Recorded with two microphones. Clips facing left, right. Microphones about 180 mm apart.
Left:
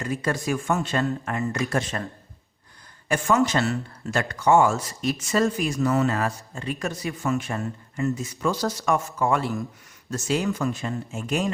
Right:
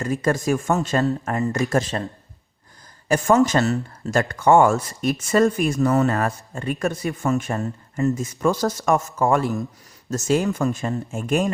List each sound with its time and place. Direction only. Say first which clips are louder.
0.0 s a man's voice: right 5 dB; 45° right (ahead or behind)
3.1 s speech: right 5 dB; 40° right (ahead or behind)